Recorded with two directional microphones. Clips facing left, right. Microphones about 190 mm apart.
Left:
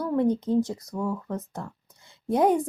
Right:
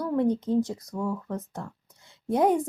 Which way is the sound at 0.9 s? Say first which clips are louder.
Left 1 dB; 50° left (ahead or behind).